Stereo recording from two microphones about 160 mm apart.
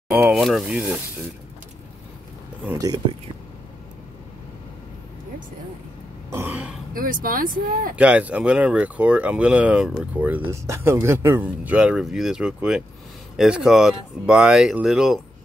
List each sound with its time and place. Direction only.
0.1 s speech: 5° right (ahead or behind)
2.6 s speech: 15° right (ahead or behind)
6.3 s speech: 10° right (ahead or behind)
6.9 s speech: 60° right (ahead or behind)
7.9 s speech: 10° right (ahead or behind)